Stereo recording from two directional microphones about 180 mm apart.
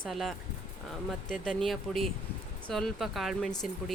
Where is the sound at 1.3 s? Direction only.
5° left (ahead or behind).